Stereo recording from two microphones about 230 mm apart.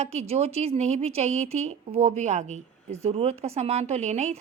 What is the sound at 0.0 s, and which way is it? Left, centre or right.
Speech, right.